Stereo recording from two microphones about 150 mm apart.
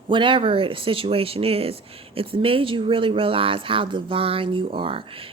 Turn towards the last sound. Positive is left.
turn(degrees=-35)  # may be behind; listen again after turning